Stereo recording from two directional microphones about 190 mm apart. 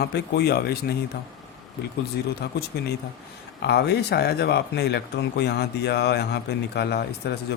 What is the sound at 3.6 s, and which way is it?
Speech, 60° left (ahead or behind).